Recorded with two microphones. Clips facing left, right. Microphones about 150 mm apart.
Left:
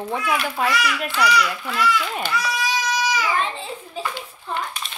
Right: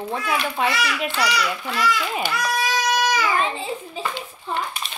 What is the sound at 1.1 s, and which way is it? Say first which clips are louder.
Speech: left 5 dB; 30° right (ahead or behind).